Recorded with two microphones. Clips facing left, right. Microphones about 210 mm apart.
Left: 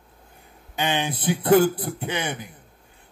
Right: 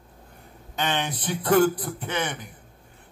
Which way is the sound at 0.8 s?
10° left (ahead or behind).